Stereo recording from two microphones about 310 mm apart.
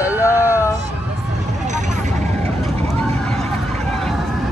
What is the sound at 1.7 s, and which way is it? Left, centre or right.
Vehicle, right.